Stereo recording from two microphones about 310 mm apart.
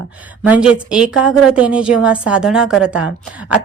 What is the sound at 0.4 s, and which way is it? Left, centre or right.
Speech, centre.